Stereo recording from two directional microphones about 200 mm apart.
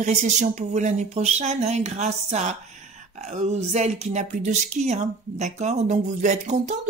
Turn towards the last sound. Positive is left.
turn(degrees=-35)  # may be behind; listen again after turning